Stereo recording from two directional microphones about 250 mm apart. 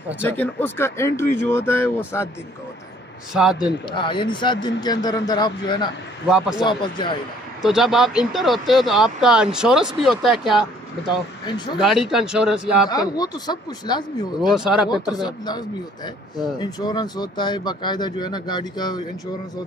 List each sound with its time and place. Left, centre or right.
0.2 s speech: centre
3.3 s speech: centre
3.9 s speech: centre
7.6 s speech: centre
11.4 s speech: centre
11.8 s speech: centre
13.1 s speech: centre
14.4 s speech: centre
15.2 s speech: centre